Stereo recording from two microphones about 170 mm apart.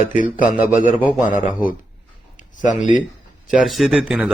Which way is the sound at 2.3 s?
50° left (ahead or behind).